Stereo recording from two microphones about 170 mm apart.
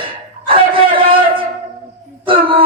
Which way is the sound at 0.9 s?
30° right (ahead or behind).